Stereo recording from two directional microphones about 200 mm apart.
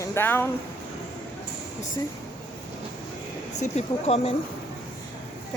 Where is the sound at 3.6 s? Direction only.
35° left (ahead or behind).